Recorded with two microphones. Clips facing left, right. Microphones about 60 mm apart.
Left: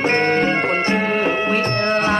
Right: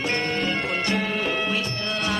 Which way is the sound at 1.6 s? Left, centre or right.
Left.